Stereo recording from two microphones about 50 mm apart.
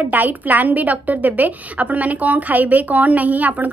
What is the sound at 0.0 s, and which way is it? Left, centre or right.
Speech, right.